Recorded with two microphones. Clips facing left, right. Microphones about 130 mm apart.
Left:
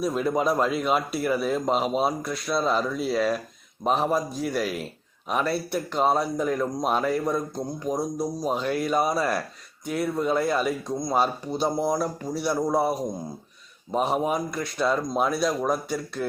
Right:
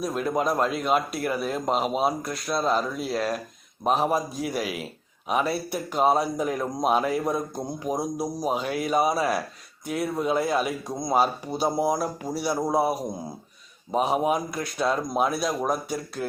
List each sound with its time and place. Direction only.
0.0 s a man's voice: centre (ahead or behind)